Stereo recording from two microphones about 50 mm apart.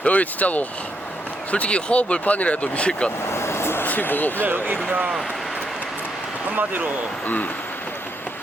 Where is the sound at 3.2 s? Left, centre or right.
Left.